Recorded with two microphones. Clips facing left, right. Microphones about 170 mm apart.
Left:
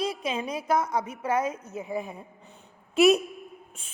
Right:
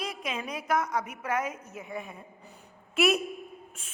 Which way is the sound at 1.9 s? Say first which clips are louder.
Left 6 dB; centre (ahead or behind).